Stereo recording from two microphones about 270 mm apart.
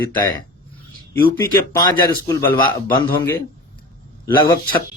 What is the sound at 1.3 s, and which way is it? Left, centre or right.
A man's voice, centre.